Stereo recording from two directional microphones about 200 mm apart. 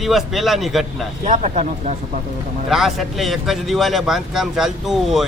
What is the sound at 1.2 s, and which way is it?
Speech, 35° right (ahead or behind).